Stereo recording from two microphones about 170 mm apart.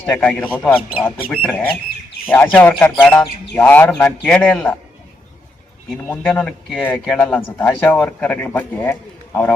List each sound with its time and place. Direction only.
0.0 s speech: 10° left (ahead or behind)
6.1 s speech: 10° left (ahead or behind)